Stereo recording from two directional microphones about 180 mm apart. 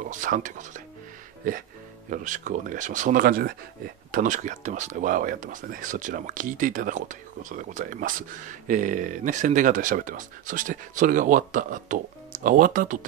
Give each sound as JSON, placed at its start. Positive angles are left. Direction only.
{"t": 0.0, "sound": "speech", "side_deg": -45}